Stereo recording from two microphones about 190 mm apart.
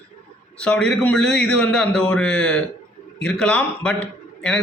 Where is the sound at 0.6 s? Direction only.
5° left (ahead or behind).